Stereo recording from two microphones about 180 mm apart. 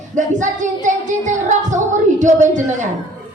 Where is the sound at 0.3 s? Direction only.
45° right (ahead or behind).